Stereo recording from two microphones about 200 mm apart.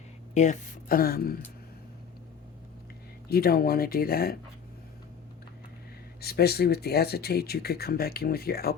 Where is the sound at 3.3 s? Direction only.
50° left (ahead or behind).